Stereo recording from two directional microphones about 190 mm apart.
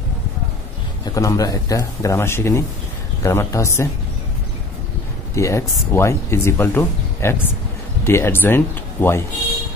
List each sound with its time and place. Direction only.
1.0 s speech: 15° left (ahead or behind)
5.3 s speech: 15° left (ahead or behind)